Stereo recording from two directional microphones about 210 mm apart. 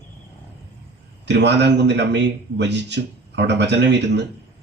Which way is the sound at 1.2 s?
55° right (ahead or behind).